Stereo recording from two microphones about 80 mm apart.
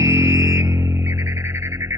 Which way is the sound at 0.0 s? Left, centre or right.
Right.